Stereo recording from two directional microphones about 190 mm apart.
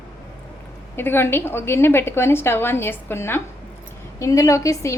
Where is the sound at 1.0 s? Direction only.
10° left (ahead or behind).